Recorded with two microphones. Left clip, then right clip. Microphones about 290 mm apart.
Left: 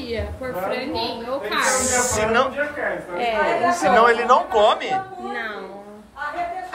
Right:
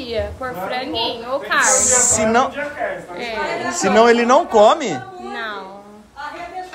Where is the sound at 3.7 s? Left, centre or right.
Right.